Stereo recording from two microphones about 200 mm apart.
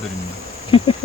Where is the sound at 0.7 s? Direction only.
25° left (ahead or behind).